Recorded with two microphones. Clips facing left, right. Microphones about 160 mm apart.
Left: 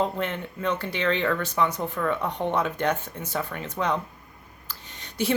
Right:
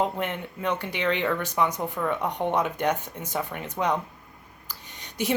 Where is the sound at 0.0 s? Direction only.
15° right (ahead or behind).